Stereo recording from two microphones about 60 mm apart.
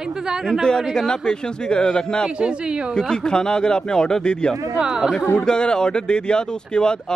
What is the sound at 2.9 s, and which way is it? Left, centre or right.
A man's voice, centre.